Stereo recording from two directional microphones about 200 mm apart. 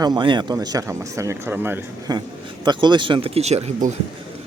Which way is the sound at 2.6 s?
20° right (ahead or behind).